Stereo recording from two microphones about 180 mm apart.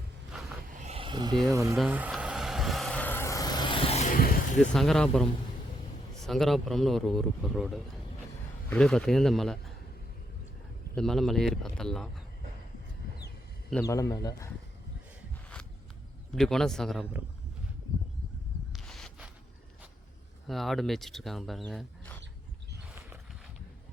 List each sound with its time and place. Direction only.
0.7 s vehicle: 45° right (ahead or behind)
0.9 s a sound: 25° right (ahead or behind)
1.7 s vehicle: 5° right (ahead or behind); by 4.0 s 30° left (ahead or behind)
4.1 s vehicle: 50° left (ahead or behind)
4.7 s speech: 5° left (ahead or behind)
10.9 s speech: centre (ahead or behind)
13.8 s speech: 20° left (ahead or behind)
16.3 s speech: centre (ahead or behind)
18.7 s a sound: centre (ahead or behind)
20.5 s speech: centre (ahead or behind)